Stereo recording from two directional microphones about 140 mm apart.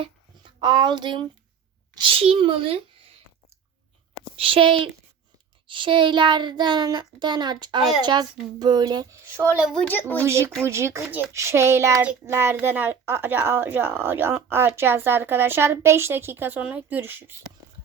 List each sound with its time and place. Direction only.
0.6 s a child's voice: 30° right (ahead or behind)
4.4 s a child's voice: 40° right (ahead or behind); by 9.5 s 15° right (ahead or behind)
9.7 s speech: 10° left (ahead or behind)
10.2 s a woman's voice: 20° right (ahead or behind)